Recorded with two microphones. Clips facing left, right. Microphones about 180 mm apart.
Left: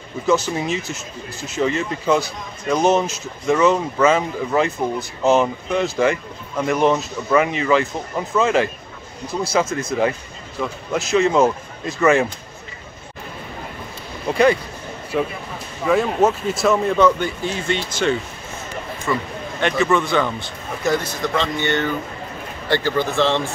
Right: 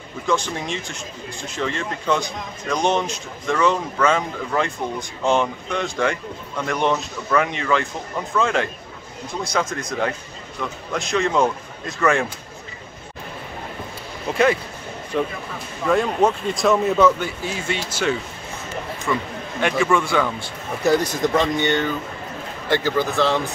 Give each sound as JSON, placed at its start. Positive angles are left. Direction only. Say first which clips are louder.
{"t": 0.3, "sound": "speech", "louder": "left 4 dB", "side_deg": 5}
{"t": 14.3, "sound": "speech", "louder": "left 3 dB", "side_deg": 0}
{"t": 15.8, "sound": "a man's voice", "louder": "left 1 dB", "side_deg": 5}
{"t": 20.8, "sound": "a man's voice", "louder": "right 3 dB", "side_deg": -40}
{"t": 21.2, "sound": "a man's voice", "louder": "right 3 dB", "side_deg": -15}
{"t": 22.9, "sound": "a man's voice", "louder": "left 2 dB", "side_deg": -5}